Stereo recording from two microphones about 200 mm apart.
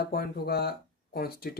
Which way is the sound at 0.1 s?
50° left (ahead or behind).